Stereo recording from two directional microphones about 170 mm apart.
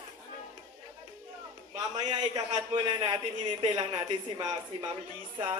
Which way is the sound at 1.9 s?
25° right (ahead or behind).